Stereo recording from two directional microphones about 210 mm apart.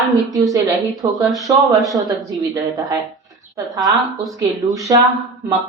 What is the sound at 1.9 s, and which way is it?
A woman's voice, 15° right (ahead or behind).